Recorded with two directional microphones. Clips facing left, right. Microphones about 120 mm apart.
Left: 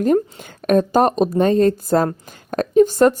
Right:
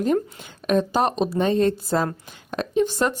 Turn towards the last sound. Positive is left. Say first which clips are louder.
# left 8 dB
turn(degrees=45)  # may be behind; listen again after turning